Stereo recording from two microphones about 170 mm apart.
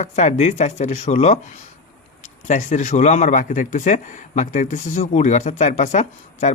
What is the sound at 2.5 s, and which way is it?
Speech, 45° left (ahead or behind).